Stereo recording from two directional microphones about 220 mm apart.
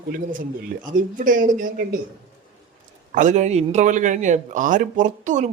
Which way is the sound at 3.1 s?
35° right (ahead or behind).